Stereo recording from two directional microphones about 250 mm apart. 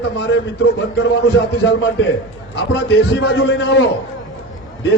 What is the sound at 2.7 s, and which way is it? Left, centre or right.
A man's voice, left.